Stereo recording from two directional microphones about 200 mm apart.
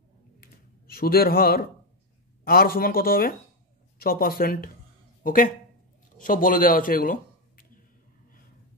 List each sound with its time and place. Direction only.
0.4 s computer keyboard: 50° left (ahead or behind)
2.4 s speech: 45° left (ahead or behind)